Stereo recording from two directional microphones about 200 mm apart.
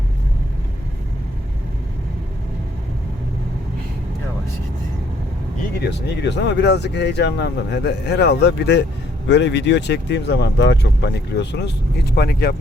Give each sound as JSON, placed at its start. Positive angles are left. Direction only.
{"t": 5.8, "sound": "speech", "side_deg": 60}